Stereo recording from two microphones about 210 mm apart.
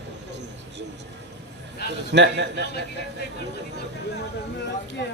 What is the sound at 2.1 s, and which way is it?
Speech, 55° right (ahead or behind).